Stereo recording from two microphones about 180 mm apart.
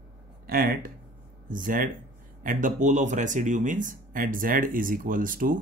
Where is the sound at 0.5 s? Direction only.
55° right (ahead or behind).